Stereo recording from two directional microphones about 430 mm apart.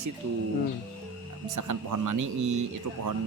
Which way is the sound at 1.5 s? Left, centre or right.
Right.